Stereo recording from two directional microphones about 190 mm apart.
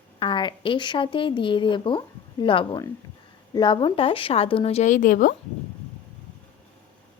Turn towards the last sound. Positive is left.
turn(degrees=45)  # may be behind; listen again after turning